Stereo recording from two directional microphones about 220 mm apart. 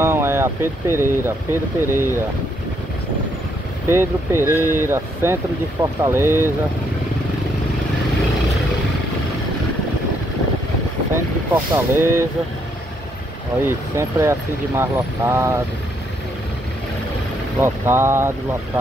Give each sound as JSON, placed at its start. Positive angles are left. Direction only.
{"t": 0.0, "sound": "speech", "side_deg": -10}
{"t": 3.9, "sound": "speech", "side_deg": -10}
{"t": 11.5, "sound": "speech", "side_deg": -10}
{"t": 13.6, "sound": "speech", "side_deg": -10}
{"t": 17.6, "sound": "speech", "side_deg": -10}